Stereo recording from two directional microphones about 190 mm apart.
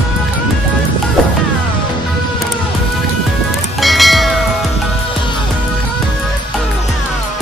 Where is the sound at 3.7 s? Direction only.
Centre (ahead or behind).